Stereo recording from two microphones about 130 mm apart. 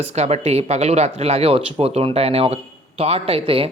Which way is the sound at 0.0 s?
55° right (ahead or behind).